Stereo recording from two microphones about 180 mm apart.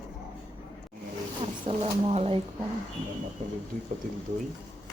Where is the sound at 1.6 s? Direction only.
35° right (ahead or behind).